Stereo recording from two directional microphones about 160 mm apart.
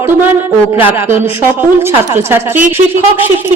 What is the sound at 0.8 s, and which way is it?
A woman's voice, 15° right (ahead or behind).